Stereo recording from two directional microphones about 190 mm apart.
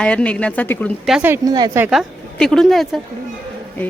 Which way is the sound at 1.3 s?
20° right (ahead or behind).